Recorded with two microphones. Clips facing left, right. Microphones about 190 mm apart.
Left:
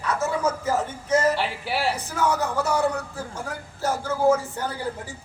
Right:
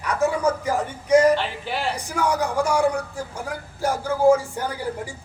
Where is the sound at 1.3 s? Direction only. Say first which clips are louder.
Right 1 dB; 10° left (ahead or behind).